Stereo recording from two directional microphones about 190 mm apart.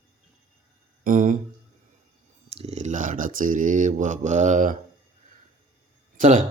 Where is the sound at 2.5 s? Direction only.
35° right (ahead or behind).